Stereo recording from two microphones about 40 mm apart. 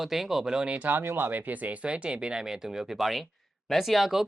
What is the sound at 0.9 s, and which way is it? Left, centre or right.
Speech, right.